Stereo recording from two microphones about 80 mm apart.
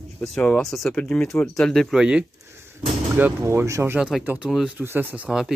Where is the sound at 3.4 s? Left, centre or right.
Right.